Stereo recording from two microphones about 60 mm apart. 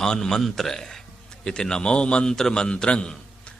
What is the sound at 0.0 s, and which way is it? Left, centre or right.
A man's voice, centre.